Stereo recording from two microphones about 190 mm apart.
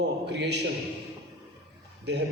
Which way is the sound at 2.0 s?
60° right (ahead or behind).